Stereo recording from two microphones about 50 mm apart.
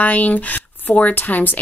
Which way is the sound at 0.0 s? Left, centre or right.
Left.